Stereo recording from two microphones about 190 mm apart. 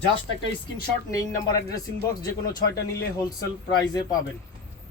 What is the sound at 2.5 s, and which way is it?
Speech, 55° left (ahead or behind).